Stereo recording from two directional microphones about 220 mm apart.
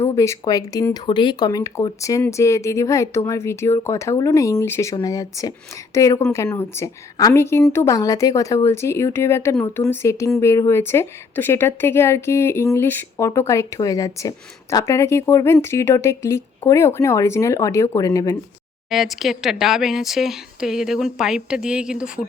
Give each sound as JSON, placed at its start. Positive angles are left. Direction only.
{"t": 0.0, "sound": "speech", "side_deg": 15}
{"t": 18.9, "sound": "speech", "side_deg": 0}